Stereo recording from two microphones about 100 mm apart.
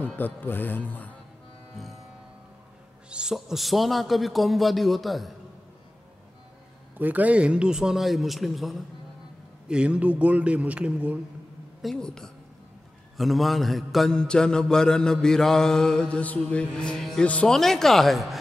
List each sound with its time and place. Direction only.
0.0 s speech: 15° left (ahead or behind)
1.8 s a man's voice: centre (ahead or behind)
3.1 s a man's voice: 5° right (ahead or behind)
7.0 s a man's voice: 15° right (ahead or behind); by 8.8 s centre (ahead or behind)
9.7 s speech: 10° right (ahead or behind)
11.8 s a man's voice: 5° left (ahead or behind)
13.2 s mantra: centre (ahead or behind)
17.3 s a man's voice: 10° left (ahead or behind)